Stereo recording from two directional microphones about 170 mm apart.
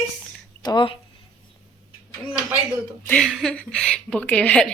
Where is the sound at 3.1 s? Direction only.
5° left (ahead or behind).